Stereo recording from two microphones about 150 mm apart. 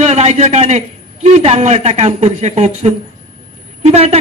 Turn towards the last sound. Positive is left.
turn(degrees=-45)  # may be behind; listen again after turning